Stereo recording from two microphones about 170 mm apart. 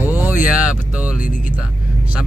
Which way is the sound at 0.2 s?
10° right (ahead or behind).